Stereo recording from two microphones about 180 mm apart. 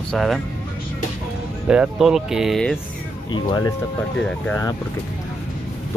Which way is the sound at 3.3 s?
20° left (ahead or behind).